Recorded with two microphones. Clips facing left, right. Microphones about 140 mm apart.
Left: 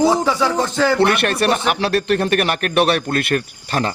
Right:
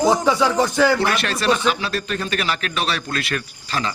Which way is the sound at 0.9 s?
60° left (ahead or behind).